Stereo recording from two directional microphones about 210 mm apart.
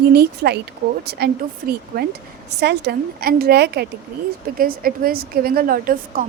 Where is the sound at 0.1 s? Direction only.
50° right (ahead or behind).